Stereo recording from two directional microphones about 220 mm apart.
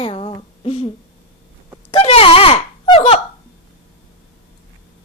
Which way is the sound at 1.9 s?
25° left (ahead or behind).